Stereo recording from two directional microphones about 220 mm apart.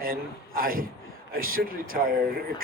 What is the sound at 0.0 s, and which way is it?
A man's voice, 40° right (ahead or behind).